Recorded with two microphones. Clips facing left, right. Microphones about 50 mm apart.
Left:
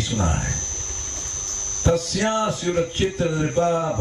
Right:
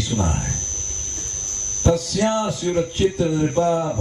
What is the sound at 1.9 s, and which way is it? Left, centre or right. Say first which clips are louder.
Speech: right 1 dB; left.